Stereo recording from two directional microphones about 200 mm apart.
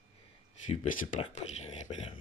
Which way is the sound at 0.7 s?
35° left (ahead or behind).